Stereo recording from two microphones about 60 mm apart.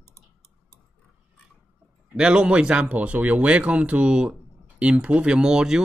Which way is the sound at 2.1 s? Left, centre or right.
Centre.